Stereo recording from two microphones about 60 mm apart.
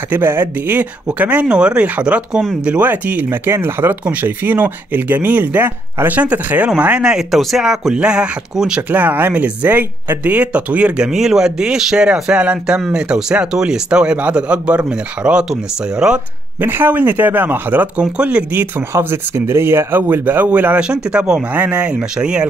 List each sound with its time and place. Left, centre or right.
0.1 s speech: right; by 2.9 s centre
2.9 s speech: right
4.0 s speech: right; by 7.2 s centre
7.2 s speech: centre
8.9 s speech: right; by 16.2 s centre
16.6 s speech: right
18.1 s speech: centre
18.9 s speech: right; by 22.5 s centre